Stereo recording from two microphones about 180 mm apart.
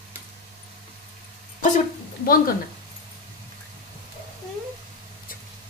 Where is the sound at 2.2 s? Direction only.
55° left (ahead or behind).